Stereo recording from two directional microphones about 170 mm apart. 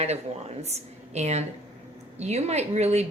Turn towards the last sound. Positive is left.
turn(degrees=-40)  # may be behind; listen again after turning